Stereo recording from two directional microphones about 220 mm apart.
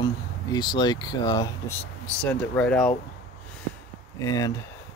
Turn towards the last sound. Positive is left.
turn(degrees=15)  # may be behind; listen again after turning